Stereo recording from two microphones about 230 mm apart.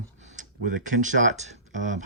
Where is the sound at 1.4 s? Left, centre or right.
Right.